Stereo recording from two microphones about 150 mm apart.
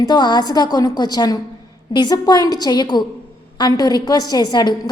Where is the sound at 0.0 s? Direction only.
25° left (ahead or behind).